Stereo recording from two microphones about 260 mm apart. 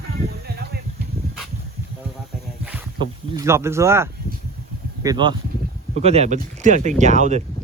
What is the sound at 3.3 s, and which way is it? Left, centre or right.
Speech, centre.